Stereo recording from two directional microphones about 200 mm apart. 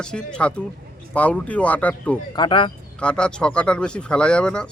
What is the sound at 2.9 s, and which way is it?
Speech, 5° left (ahead or behind).